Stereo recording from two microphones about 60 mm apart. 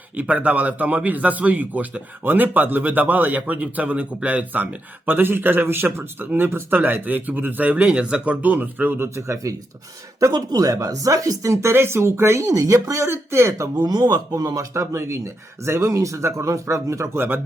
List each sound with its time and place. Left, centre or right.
0.2 s speech: right
9.1 s speech: right
10.2 s speech: right
11.6 s speech: right
12.5 s speech: right
14.3 s speech: right
14.7 s speech: right
17.2 s speech: right